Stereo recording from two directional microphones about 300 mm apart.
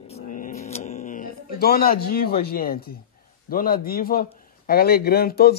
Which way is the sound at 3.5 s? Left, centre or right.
Left.